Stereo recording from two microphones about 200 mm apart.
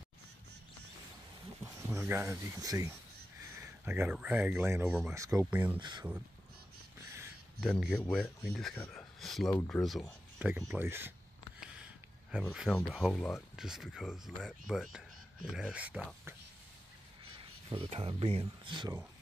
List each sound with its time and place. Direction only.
1.6 s speech: 15° right (ahead or behind)
5.8 s speech: 20° right (ahead or behind)
7.6 s speech: centre (ahead or behind)
12.3 s speech: 5° right (ahead or behind)
17.2 s speech: 25° right (ahead or behind)